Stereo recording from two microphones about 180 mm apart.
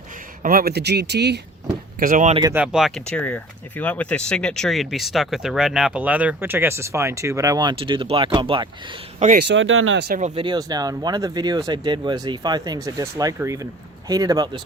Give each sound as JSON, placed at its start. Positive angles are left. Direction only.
{"t": 0.4, "sound": "speech", "side_deg": -55}
{"t": 2.0, "sound": "speech", "side_deg": -45}
{"t": 2.5, "sound": "speech", "side_deg": -5}
{"t": 9.4, "sound": "speech", "side_deg": -90}
{"t": 10.2, "sound": "speech", "side_deg": -40}
{"t": 10.4, "sound": "speech", "side_deg": -25}